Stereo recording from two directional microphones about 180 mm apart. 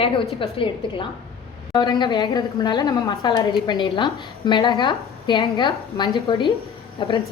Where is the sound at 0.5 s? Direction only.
30° left (ahead or behind).